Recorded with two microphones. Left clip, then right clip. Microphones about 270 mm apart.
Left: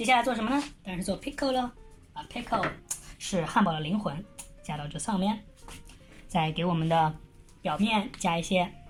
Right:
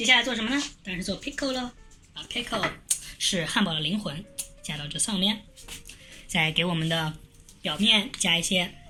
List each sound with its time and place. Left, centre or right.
0.0 s speech: centre